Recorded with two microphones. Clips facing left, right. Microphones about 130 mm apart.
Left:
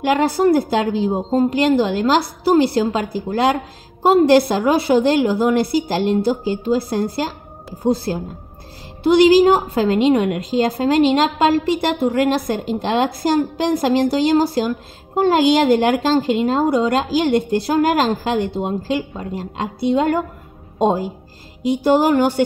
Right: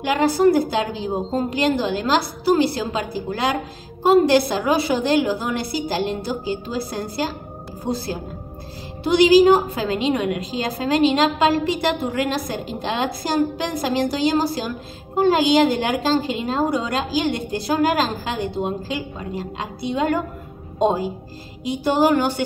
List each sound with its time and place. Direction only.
0.0 s a woman's voice: 55° left (ahead or behind)